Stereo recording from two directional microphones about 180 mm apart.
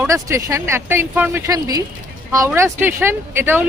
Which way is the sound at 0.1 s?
15° right (ahead or behind).